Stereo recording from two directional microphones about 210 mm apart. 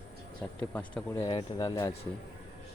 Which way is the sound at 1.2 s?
20° left (ahead or behind).